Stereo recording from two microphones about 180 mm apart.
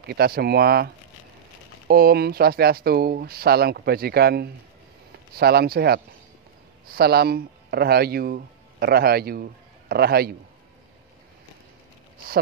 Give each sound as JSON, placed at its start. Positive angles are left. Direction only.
{"t": 0.0, "sound": "speech", "side_deg": -60}